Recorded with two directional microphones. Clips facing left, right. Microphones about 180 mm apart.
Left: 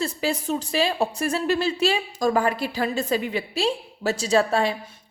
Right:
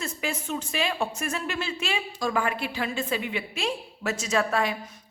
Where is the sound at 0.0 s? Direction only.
35° left (ahead or behind).